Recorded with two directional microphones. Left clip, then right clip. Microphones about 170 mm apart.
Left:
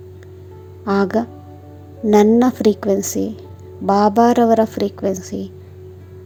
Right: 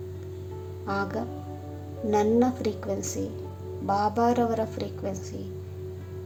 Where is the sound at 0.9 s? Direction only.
50° left (ahead or behind).